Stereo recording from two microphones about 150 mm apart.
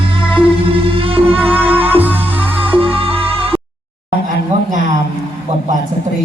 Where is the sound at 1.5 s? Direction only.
10° right (ahead or behind).